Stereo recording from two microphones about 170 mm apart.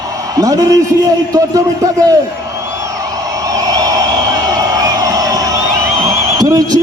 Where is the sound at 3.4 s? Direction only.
20° right (ahead or behind).